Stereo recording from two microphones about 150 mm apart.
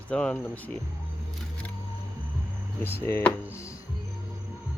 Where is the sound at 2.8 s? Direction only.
15° left (ahead or behind).